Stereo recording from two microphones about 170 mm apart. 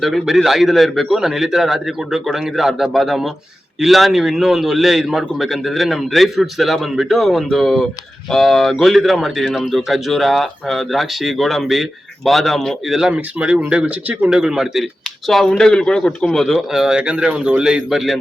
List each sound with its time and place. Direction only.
0.0 s a man's voice: centre (ahead or behind)